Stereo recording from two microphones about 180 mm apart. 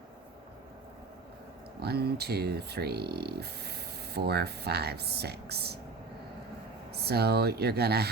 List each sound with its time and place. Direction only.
1.8 s speech: 60° right (ahead or behind)
6.9 s speech: 60° right (ahead or behind)